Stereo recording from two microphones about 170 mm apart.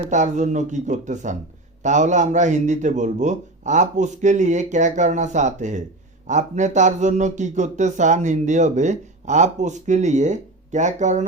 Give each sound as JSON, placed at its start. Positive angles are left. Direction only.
{"t": 0.1, "sound": "speech", "side_deg": -45}